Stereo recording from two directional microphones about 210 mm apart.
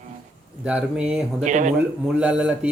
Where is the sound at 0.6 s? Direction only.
5° right (ahead or behind).